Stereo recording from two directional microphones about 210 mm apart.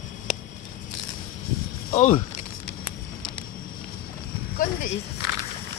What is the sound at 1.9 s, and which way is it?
Speech, 35° left (ahead or behind).